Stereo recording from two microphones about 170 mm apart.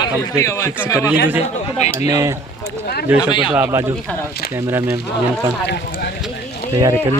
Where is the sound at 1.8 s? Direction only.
40° left (ahead or behind).